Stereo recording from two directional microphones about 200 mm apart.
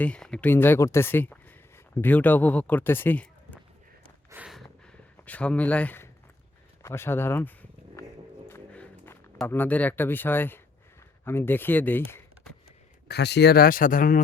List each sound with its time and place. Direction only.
0.0 s speech: 5° left (ahead or behind)
4.3 s a sound: 5° right (ahead or behind)
11.3 s speech: 10° left (ahead or behind)
13.1 s speech: 55° left (ahead or behind)